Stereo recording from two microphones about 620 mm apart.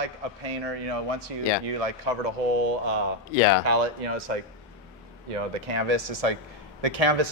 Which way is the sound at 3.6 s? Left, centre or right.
Right.